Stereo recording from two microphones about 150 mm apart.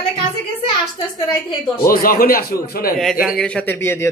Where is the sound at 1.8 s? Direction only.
75° left (ahead or behind).